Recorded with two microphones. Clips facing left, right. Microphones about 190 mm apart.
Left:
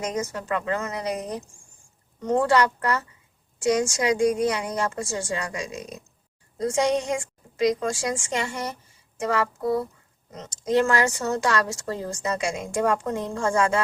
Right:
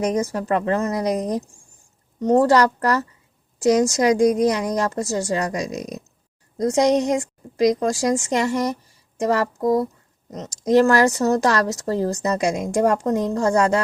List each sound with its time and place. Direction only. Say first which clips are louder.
0.0 s a woman's voice: right 7 dB; 35° right (ahead or behind)